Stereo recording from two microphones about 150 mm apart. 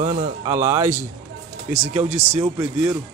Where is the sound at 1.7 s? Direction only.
45° right (ahead or behind).